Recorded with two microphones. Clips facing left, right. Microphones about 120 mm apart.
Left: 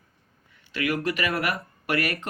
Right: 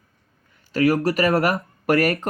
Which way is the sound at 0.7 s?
40° right (ahead or behind).